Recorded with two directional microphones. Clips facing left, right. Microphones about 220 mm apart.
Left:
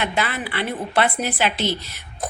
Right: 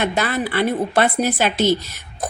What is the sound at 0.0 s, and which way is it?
A woman's voice, 45° right (ahead or behind).